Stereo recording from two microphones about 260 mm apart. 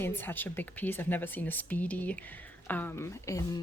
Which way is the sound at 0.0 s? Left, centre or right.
Centre.